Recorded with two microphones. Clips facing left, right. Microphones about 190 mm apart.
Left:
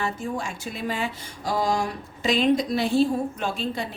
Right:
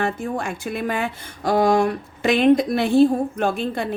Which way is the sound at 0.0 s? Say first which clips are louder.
Right 5 dB; 60° right (ahead or behind).